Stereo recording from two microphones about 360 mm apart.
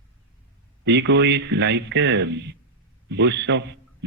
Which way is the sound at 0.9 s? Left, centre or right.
Right.